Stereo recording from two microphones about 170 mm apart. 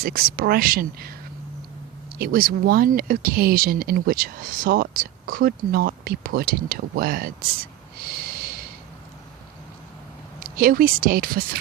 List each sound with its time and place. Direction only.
0.0 s speech: 60° right (ahead or behind)
2.1 s speech: 60° right (ahead or behind)
10.4 s speech: 55° right (ahead or behind)